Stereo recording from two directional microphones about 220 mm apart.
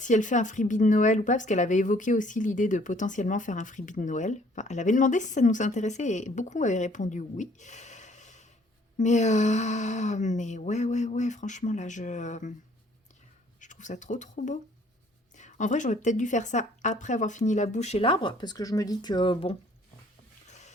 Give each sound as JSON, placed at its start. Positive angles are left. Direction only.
{"t": 0.0, "sound": "speech", "side_deg": 35}
{"t": 13.6, "sound": "speech", "side_deg": 35}
{"t": 20.5, "sound": "music", "side_deg": 30}